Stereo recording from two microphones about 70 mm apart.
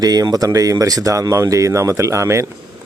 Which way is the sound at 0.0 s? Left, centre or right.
Right.